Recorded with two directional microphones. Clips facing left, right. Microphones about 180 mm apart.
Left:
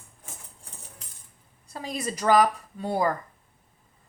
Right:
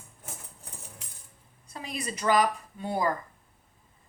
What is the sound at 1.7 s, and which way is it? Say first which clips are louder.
Speech: left 4 dB; 35° left (ahead or behind).